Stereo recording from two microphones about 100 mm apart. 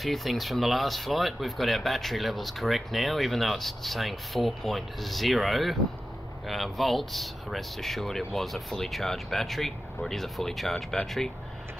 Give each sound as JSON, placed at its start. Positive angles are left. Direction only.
{"t": 0.0, "sound": "speech", "side_deg": 0}